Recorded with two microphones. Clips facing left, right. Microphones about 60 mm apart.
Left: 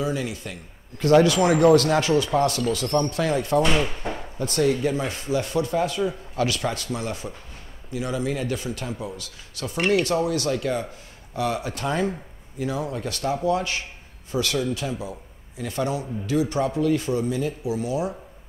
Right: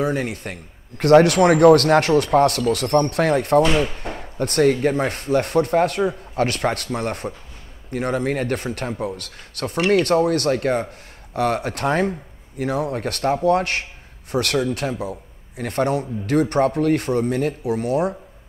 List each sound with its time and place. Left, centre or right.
0.0 s a man's voice: right